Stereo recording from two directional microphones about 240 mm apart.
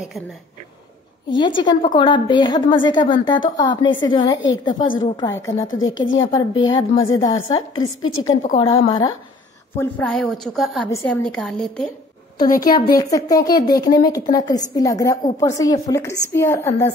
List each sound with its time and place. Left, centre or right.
1.3 s a woman's voice: centre
7.8 s a woman's voice: left
8.5 s speech: centre
9.8 s a woman's voice: centre
12.4 s a woman's voice: left
12.7 s speech: centre